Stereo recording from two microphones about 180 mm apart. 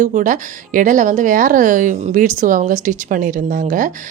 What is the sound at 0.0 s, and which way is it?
Speech, 45° right (ahead or behind).